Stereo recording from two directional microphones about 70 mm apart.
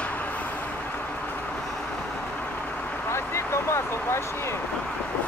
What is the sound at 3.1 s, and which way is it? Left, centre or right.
Vehicle, left.